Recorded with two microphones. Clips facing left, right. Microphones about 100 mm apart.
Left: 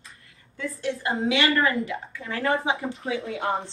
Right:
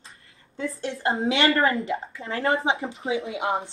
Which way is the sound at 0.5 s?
30° right (ahead or behind).